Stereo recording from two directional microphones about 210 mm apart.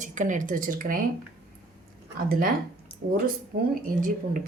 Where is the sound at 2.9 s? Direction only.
25° left (ahead or behind).